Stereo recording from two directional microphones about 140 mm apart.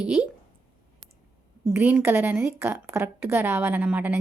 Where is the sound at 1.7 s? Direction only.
15° right (ahead or behind).